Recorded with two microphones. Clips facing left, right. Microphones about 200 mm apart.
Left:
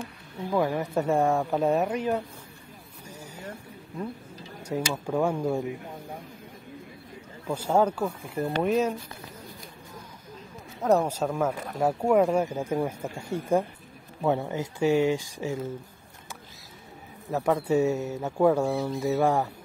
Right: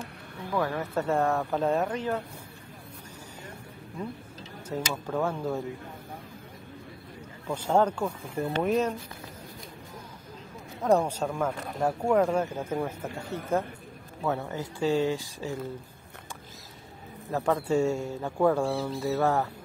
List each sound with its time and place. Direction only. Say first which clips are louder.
0.5 s speech: left 3 dB; 15° left (ahead or behind)
4.4 s speech: left 3 dB; 10° left (ahead or behind)
7.4 s speech: left 1 dB; 10° left (ahead or behind)
10.8 s speech: left 1 dB; 5° left (ahead or behind)
17.4 s a man's voice: left 2 dB; 20° left (ahead or behind)
18.2 s speech: left 2 dB; 5° left (ahead or behind)